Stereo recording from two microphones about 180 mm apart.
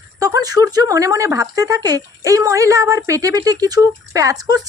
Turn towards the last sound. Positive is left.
turn(degrees=-20)  # may be behind; listen again after turning